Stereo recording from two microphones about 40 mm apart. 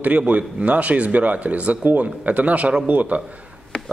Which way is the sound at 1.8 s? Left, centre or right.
Right.